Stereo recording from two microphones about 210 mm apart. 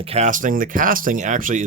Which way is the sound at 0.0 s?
30° right (ahead or behind).